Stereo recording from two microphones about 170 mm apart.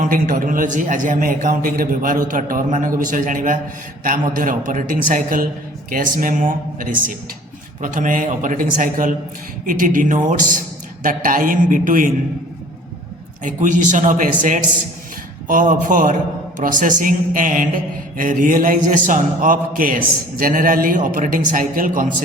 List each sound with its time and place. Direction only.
0.0 s a man's voice: 55° right (ahead or behind)
13.4 s a man's voice: 50° right (ahead or behind)